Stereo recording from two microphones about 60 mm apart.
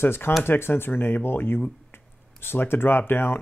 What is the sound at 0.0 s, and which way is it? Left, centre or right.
Speech, left.